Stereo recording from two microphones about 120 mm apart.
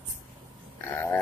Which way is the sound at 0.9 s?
20° left (ahead or behind).